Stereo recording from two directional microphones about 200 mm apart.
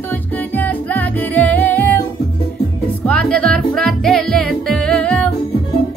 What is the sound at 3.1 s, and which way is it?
Music, 5° left (ahead or behind).